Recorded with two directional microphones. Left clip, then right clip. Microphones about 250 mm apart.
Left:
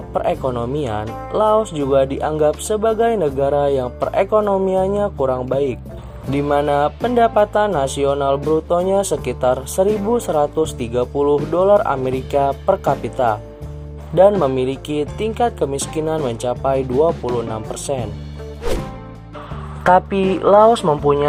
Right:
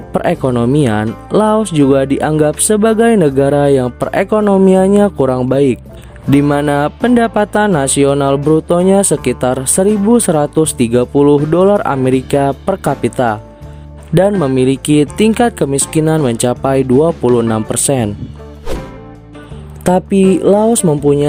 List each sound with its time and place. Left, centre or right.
0.1 s speech: right
19.8 s speech: right
20.8 s speech: right